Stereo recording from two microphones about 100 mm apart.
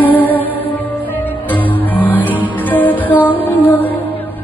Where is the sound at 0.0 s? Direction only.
15° left (ahead or behind).